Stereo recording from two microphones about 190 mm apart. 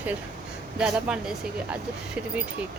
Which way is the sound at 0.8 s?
5° right (ahead or behind).